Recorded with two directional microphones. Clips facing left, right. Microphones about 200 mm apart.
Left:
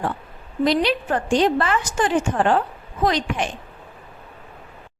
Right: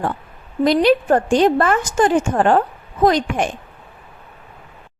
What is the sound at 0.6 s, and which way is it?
A woman's voice, 50° right (ahead or behind).